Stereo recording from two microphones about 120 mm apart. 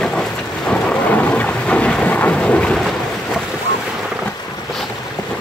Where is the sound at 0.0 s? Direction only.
5° left (ahead or behind).